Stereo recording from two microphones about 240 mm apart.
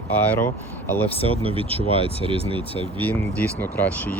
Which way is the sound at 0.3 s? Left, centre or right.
Centre.